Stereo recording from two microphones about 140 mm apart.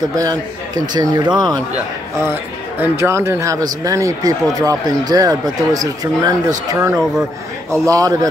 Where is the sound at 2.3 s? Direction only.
15° right (ahead or behind).